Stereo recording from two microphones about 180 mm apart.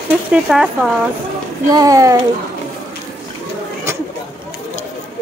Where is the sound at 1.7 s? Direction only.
20° right (ahead or behind).